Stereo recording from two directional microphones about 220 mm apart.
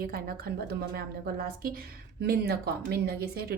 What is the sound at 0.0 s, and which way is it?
A woman's voice, 40° right (ahead or behind).